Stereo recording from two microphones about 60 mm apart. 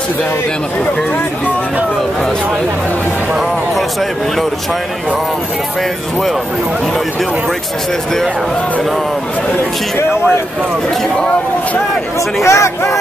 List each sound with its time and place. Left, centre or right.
12.4 s speech: left